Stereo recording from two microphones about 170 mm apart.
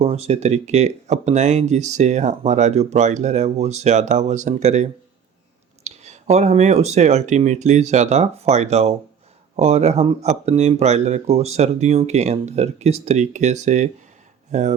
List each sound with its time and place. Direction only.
0.0 s speech: 40° right (ahead or behind)
5.8 s a sound: 40° right (ahead or behind)
6.3 s speech: 40° right (ahead or behind)